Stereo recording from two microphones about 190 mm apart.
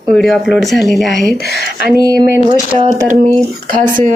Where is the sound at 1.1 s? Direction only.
60° left (ahead or behind).